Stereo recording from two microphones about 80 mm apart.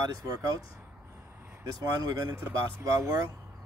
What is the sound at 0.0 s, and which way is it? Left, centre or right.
Speech, right.